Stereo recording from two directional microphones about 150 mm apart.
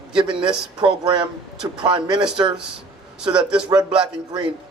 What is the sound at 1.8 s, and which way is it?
Speech, 30° right (ahead or behind).